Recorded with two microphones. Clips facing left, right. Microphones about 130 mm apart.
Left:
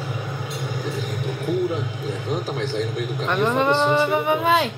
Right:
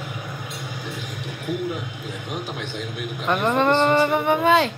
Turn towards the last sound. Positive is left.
turn(degrees=0)  # may be behind; listen again after turning